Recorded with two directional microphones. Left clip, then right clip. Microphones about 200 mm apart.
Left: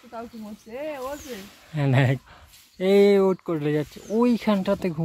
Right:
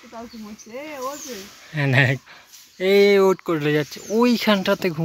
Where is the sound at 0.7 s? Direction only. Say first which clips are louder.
Right 1 dB; 10° left (ahead or behind).